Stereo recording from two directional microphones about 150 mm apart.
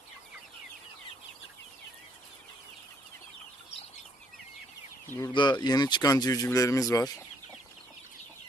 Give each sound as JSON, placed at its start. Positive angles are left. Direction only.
{"t": 5.3, "sound": "speech", "side_deg": 30}